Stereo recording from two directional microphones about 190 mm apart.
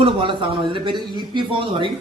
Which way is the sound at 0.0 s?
30° right (ahead or behind).